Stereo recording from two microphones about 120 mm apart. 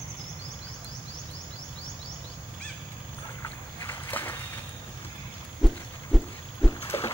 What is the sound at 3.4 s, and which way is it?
Boat, 20° left (ahead or behind).